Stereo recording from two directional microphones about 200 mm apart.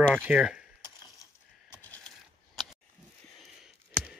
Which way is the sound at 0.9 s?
20° left (ahead or behind).